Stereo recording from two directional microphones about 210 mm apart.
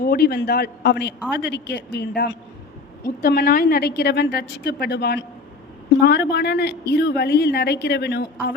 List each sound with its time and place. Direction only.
0.0 s a woman's voice: 45° left (ahead or behind)